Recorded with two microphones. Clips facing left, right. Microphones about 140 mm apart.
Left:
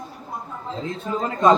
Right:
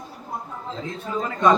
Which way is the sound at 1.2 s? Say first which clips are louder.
Left 2 dB; 30° left (ahead or behind).